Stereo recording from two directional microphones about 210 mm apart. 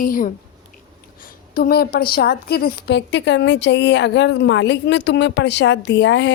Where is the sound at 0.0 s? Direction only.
40° left (ahead or behind).